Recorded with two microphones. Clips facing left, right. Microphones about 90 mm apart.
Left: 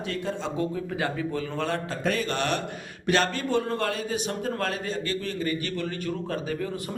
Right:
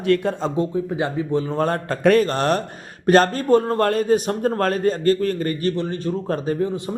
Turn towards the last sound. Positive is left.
turn(degrees=-25)  # may be behind; listen again after turning